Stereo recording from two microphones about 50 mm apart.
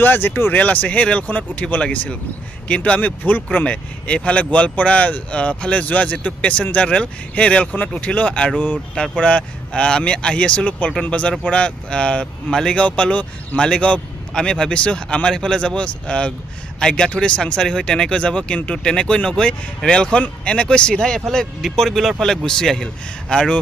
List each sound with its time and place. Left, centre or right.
0.0 s speech: left
8.9 s speech: centre
12.8 s speech: left; by 23.5 s centre